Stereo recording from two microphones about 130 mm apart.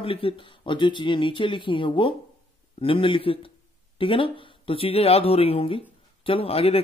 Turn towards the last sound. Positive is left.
turn(degrees=50)  # may be behind; listen again after turning